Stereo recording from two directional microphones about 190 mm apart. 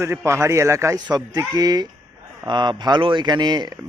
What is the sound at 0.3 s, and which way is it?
A man's voice, 15° right (ahead or behind).